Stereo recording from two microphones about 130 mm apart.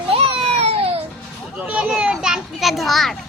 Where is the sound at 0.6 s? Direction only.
50° right (ahead or behind).